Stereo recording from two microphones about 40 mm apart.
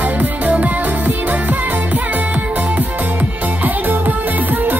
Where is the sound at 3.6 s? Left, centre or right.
Right.